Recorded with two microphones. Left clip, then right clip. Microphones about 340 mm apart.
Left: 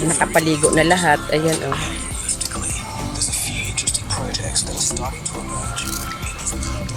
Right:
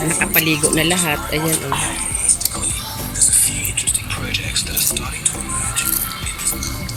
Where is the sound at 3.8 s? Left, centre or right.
Left.